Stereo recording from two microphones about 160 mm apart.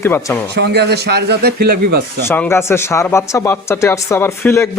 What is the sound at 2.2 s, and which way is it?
Speech, 15° left (ahead or behind).